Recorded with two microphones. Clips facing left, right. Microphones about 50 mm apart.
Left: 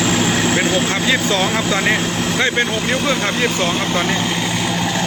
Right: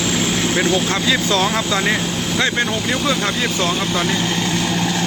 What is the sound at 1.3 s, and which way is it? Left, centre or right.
Speech, centre.